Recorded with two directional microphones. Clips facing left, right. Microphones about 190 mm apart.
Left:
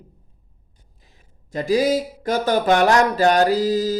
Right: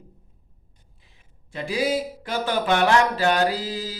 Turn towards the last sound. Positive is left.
turn(degrees=40)  # may be behind; listen again after turning